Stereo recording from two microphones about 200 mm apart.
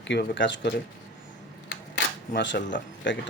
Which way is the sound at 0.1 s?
65° left (ahead or behind).